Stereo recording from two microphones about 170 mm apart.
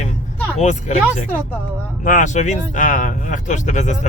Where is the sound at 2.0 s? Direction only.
45° left (ahead or behind).